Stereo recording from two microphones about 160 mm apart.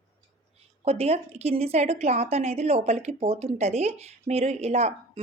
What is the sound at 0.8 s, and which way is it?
A woman's voice, 40° right (ahead or behind).